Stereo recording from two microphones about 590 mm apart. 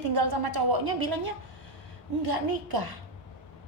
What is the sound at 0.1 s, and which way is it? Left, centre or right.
A woman's voice, right.